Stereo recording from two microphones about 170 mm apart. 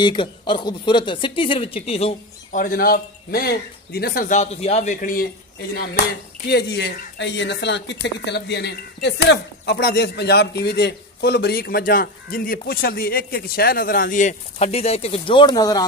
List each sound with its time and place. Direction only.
0.0 s speech: 30° left (ahead or behind)
2.6 s a man's voice: 55° left (ahead or behind)
6.5 s speech: 80° left; by 15.8 s 25° left (ahead or behind)